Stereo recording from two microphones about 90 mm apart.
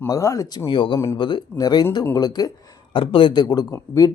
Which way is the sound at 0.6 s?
60° left (ahead or behind).